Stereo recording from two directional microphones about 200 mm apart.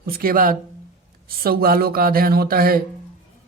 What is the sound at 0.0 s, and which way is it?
Speech, 45° right (ahead or behind).